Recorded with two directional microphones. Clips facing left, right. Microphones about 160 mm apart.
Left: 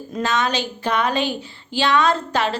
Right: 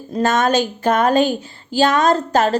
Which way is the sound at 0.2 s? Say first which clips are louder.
Right 6 dB; 45° right (ahead or behind).